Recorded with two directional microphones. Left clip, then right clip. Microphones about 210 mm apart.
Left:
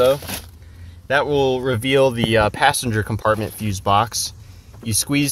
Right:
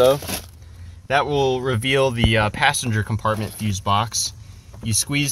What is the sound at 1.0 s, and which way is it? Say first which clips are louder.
Speech: left 2 dB; centre (ahead or behind).